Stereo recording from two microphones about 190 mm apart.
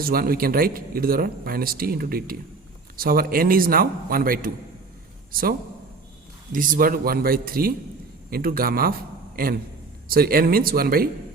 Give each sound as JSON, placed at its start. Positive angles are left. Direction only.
{"t": 0.0, "sound": "a man's voice", "side_deg": -50}